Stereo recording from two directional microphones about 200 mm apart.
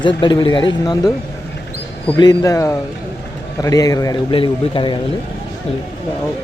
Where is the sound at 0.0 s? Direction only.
25° left (ahead or behind).